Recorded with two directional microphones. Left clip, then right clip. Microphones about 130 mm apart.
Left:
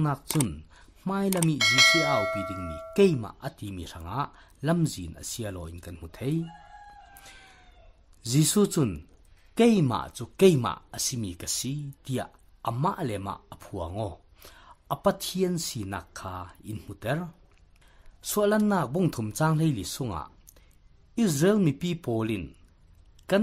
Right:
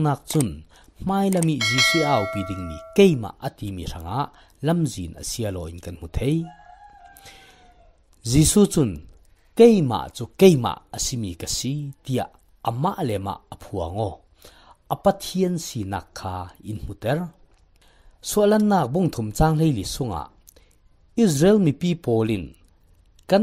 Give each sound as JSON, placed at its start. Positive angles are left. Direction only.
{"t": 0.0, "sound": "speech", "side_deg": -35}
{"t": 1.0, "sound": "a sound", "side_deg": -15}
{"t": 1.6, "sound": "speech", "side_deg": 0}
{"t": 2.9, "sound": "speech", "side_deg": -30}
{"t": 7.2, "sound": "cat", "side_deg": -30}
{"t": 8.2, "sound": "speech", "side_deg": -30}
{"t": 9.5, "sound": "speech", "side_deg": -20}